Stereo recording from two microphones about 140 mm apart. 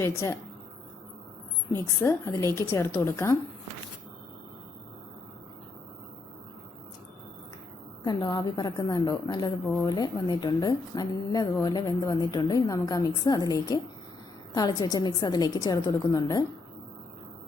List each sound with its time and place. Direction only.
0.0 s a woman's voice: 20° left (ahead or behind)
2.0 s a woman's voice: 20° left (ahead or behind)
8.0 s a woman's voice: 30° left (ahead or behind)